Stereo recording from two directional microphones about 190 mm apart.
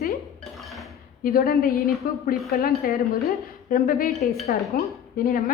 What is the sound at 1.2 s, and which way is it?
A woman's voice, 50° left (ahead or behind).